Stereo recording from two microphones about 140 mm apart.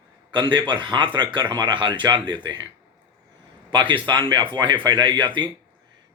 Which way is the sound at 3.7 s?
35° right (ahead or behind).